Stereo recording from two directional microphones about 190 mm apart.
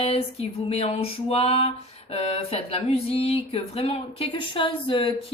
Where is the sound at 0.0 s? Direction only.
30° left (ahead or behind).